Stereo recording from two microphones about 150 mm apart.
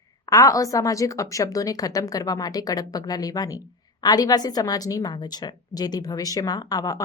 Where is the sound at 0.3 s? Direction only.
25° left (ahead or behind).